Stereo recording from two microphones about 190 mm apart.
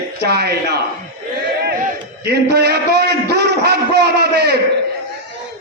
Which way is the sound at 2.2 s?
60° right (ahead or behind).